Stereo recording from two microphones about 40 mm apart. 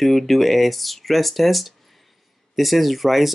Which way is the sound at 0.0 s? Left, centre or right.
Centre.